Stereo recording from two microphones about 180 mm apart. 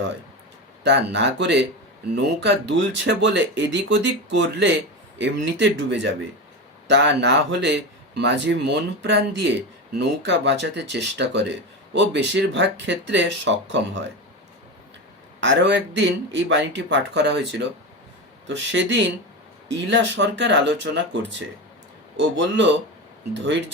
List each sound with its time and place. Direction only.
0.9 s speech: 75° right (ahead or behind)
6.8 s speech: 75° right (ahead or behind)
15.4 s speech: 85° right
18.4 s speech: 90° right